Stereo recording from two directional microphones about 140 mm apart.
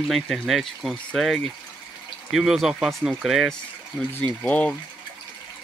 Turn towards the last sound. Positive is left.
turn(degrees=10)  # may be behind; listen again after turning